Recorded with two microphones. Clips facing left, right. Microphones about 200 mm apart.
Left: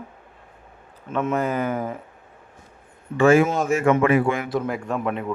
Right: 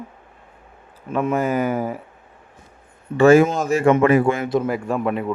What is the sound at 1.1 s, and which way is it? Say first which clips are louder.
Speech: right 3 dB; 10° right (ahead or behind).